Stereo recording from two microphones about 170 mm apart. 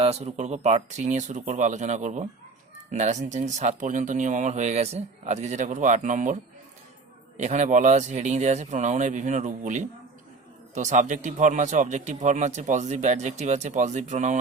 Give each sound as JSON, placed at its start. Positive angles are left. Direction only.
{"t": 0.0, "sound": "speech", "side_deg": -40}
{"t": 7.3, "sound": "speech", "side_deg": -45}